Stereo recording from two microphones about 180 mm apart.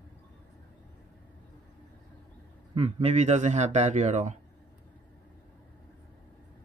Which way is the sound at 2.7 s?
35° right (ahead or behind).